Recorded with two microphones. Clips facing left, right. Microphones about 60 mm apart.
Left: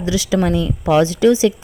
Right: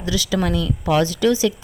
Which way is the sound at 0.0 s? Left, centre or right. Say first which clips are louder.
Left 4 dB; left.